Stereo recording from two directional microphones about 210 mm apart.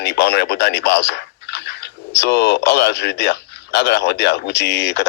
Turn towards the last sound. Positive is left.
turn(degrees=55)  # may be behind; listen again after turning